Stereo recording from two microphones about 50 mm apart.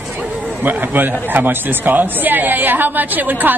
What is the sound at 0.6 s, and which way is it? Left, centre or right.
A woman's voice, right.